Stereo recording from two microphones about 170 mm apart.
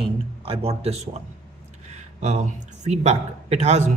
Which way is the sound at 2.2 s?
45° right (ahead or behind).